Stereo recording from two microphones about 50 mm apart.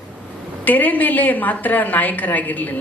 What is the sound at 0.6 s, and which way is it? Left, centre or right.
A woman's voice, left.